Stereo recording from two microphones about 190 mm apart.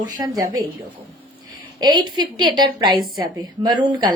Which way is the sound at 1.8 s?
20° right (ahead or behind).